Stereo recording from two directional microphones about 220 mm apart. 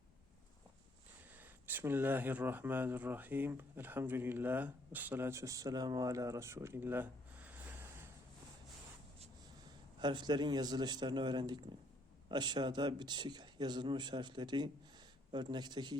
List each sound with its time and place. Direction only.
1.4 s speech: 10° right (ahead or behind)
10.0 s speech: 20° right (ahead or behind)